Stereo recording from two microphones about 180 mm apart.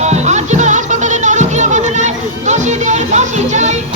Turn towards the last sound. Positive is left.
turn(degrees=-40)  # may be behind; listen again after turning